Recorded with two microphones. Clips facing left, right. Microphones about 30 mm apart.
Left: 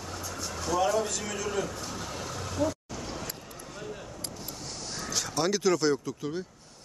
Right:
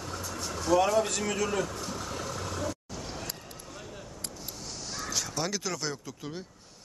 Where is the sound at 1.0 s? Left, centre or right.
Right.